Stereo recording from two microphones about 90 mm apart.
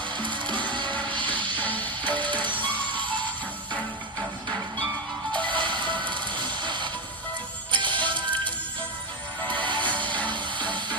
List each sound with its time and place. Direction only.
0.2 s music: 60° right (ahead or behind)
1.6 s music: 20° left (ahead or behind)
2.1 s music: 60° right (ahead or behind)
5.5 s music: 65° right (ahead or behind)
9.6 s music: 60° right (ahead or behind)